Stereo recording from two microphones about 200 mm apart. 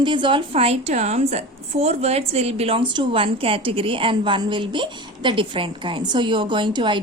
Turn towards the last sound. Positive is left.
turn(degrees=-20)  # may be behind; listen again after turning